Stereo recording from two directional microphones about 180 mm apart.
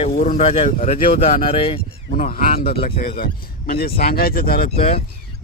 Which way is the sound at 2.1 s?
45° left (ahead or behind).